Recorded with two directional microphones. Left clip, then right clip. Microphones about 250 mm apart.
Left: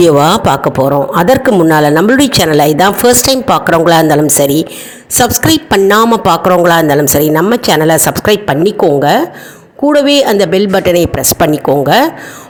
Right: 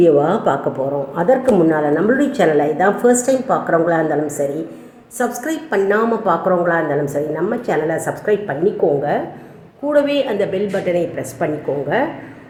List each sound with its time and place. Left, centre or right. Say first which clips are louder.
0.0 s a woman's voice: left 6 dB; left